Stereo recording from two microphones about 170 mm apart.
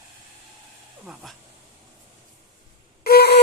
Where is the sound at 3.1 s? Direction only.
70° left (ahead or behind).